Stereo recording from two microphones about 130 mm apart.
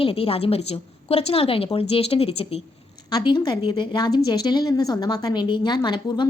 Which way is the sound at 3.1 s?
35° left (ahead or behind).